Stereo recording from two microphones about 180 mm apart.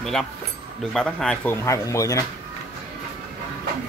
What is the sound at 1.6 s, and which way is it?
Speech, 15° left (ahead or behind).